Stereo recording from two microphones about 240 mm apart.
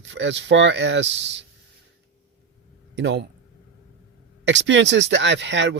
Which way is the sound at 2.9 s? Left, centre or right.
Right.